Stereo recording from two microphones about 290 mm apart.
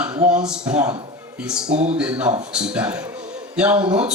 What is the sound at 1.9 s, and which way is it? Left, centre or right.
Speech, centre.